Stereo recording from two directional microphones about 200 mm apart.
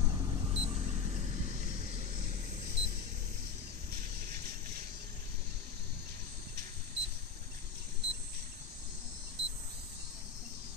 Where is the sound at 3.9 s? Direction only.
50° right (ahead or behind).